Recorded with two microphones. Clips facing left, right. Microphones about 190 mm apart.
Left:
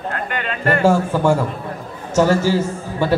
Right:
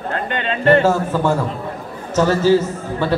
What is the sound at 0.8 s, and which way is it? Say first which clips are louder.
A man's voice: left 1 dB; 10° left (ahead or behind).